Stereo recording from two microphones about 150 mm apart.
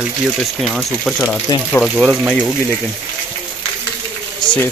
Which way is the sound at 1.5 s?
25° left (ahead or behind).